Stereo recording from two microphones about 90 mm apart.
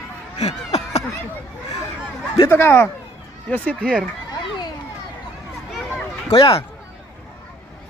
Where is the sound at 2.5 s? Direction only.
25° left (ahead or behind).